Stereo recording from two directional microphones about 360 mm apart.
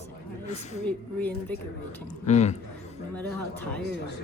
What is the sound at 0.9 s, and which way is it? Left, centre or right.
Speech, centre.